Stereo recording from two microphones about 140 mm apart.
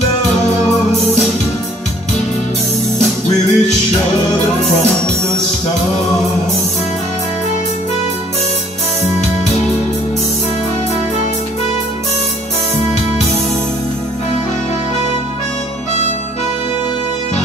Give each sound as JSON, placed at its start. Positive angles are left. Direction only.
{"t": 3.0, "sound": "music", "side_deg": 55}